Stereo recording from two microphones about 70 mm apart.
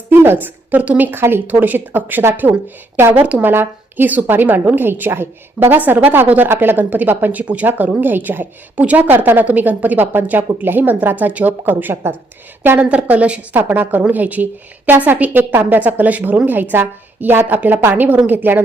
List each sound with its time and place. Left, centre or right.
0.1 s speech: right
5.7 s speech: right
12.8 s speech: centre